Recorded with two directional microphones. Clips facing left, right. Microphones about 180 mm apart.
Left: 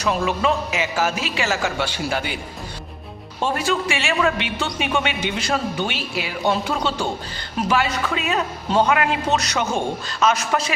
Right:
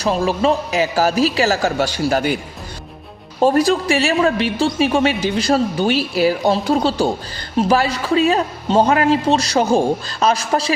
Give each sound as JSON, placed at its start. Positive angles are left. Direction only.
{"t": 0.0, "sound": "a man's voice", "side_deg": -35}
{"t": 3.4, "sound": "a man's voice", "side_deg": -40}